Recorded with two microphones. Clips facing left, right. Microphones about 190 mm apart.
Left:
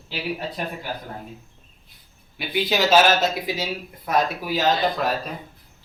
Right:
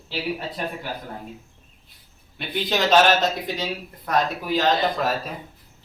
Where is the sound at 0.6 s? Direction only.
5° left (ahead or behind).